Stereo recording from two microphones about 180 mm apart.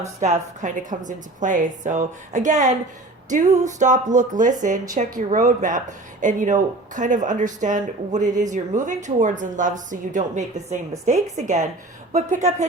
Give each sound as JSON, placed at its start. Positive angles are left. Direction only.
{"t": 0.2, "sound": "speech", "side_deg": -40}
{"t": 3.2, "sound": "music", "side_deg": -45}
{"t": 3.6, "sound": "speech", "side_deg": -45}